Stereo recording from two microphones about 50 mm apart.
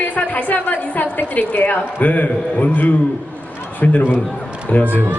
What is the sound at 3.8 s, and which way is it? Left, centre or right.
A woman's voice, left.